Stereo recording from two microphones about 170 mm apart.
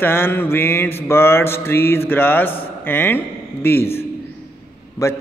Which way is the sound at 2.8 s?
10° left (ahead or behind).